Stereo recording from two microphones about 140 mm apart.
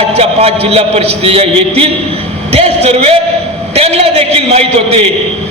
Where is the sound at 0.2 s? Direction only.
45° right (ahead or behind).